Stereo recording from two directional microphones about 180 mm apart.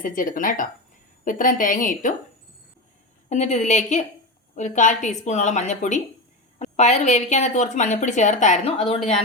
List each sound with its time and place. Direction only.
0.0 s a woman's voice: 50° left (ahead or behind)
3.2 s a woman's voice: 40° left (ahead or behind)